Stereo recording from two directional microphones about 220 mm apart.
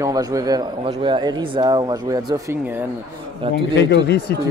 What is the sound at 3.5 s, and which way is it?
Speech, 50° left (ahead or behind).